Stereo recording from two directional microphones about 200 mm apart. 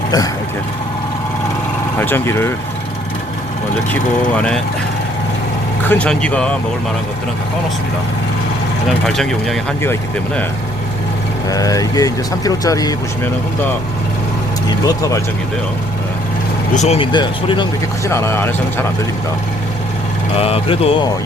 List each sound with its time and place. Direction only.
2.0 s speech: 10° left (ahead or behind)
4.4 s speech: 5° left (ahead or behind)
5.9 s speech: 5° left (ahead or behind)
9.0 s speech: 5° left (ahead or behind)
11.5 s speech: 15° left (ahead or behind)
14.7 s speech: 20° left (ahead or behind)
16.7 s speech: 35° left (ahead or behind); by 18.9 s 10° left (ahead or behind)
20.3 s speech: 30° left (ahead or behind)